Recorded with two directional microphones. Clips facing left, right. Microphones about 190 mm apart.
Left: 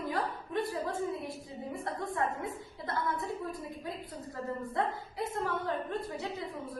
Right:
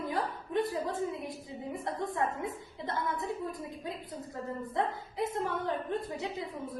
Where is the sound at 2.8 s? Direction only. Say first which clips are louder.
Even; 20° right (ahead or behind).